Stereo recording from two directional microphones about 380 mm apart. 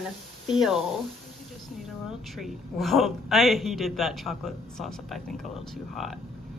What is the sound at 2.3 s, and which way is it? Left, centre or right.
A woman's voice, centre.